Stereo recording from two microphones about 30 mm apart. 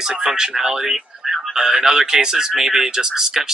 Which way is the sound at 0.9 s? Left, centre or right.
Centre.